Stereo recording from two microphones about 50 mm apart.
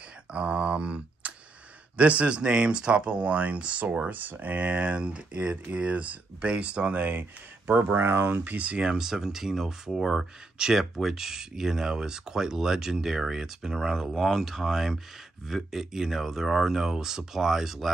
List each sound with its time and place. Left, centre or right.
0.3 s a sound: right
2.0 s speech: right
8.5 s speech: right
8.9 s speech: centre
14.1 s speech: centre